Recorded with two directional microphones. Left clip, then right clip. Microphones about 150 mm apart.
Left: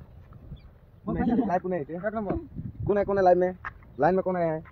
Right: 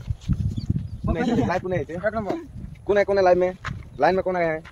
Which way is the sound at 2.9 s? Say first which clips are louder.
Right 4 dB; 60° left (ahead or behind).